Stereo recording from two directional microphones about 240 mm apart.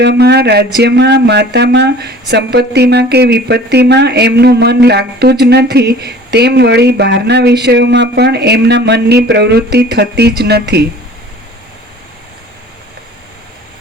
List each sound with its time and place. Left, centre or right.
0.0 s speech: right